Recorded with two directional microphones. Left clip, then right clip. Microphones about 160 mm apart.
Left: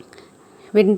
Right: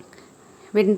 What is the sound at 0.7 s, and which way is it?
Speech, 20° left (ahead or behind).